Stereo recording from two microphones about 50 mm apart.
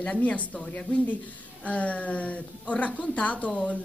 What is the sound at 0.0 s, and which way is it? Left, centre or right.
Speech, left.